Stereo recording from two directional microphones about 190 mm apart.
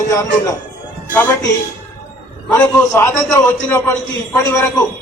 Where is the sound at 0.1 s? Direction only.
15° left (ahead or behind).